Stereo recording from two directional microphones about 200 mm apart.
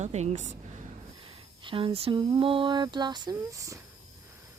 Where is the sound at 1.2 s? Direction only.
25° right (ahead or behind).